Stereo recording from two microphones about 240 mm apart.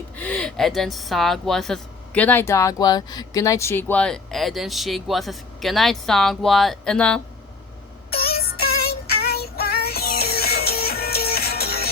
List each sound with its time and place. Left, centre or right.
0.2 s speech: centre
8.1 s music: left